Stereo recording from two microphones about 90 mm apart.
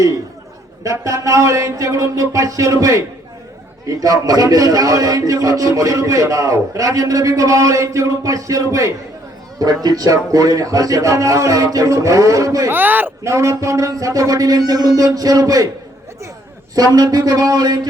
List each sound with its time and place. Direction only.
0.9 s a man's voice: 35° right (ahead or behind)
12.7 s speech: 20° right (ahead or behind)
13.2 s a man's voice: 35° right (ahead or behind)
16.7 s speech: 45° right (ahead or behind)